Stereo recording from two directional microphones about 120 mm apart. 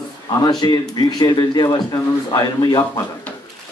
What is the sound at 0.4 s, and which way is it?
A man's voice, 35° left (ahead or behind).